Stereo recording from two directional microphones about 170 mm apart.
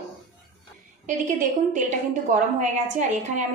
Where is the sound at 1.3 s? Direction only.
50° right (ahead or behind).